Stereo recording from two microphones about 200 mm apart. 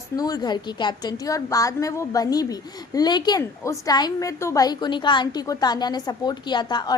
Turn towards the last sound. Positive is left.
turn(degrees=20)  # may be behind; listen again after turning